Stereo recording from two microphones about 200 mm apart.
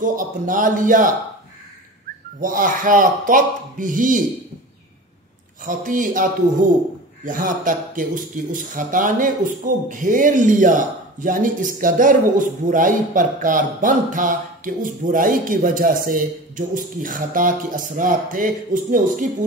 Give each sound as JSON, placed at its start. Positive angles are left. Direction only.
{"t": 0.0, "sound": "speech", "side_deg": -40}
{"t": 2.4, "sound": "speech", "side_deg": -40}
{"t": 5.6, "sound": "speech", "side_deg": -40}